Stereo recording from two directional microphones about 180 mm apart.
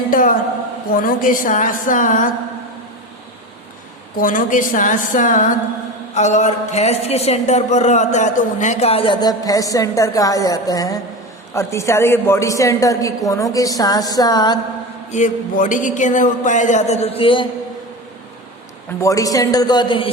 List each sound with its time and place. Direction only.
0.1 s a woman's voice: 50° left (ahead or behind)
4.2 s a man's voice: 50° left (ahead or behind); by 14.6 s 20° left (ahead or behind)
15.1 s a man's voice: 45° left (ahead or behind); by 17.5 s 30° left (ahead or behind)
18.9 s a woman's voice: 20° left (ahead or behind)